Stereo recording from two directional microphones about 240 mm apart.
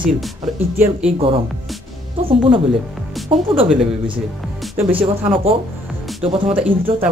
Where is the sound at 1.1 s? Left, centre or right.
Right.